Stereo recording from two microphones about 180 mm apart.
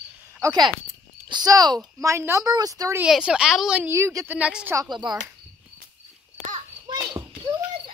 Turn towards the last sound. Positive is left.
turn(degrees=-25)  # may be behind; listen again after turning